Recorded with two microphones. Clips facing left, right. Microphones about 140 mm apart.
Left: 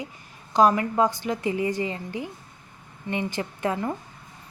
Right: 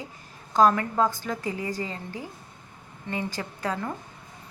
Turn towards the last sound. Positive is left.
turn(degrees=20)  # may be behind; listen again after turning